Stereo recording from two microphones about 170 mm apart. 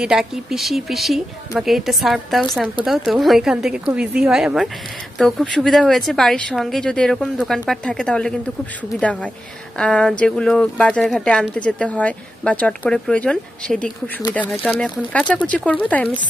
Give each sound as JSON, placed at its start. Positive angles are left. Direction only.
{"t": 0.0, "sound": "speech", "side_deg": 0}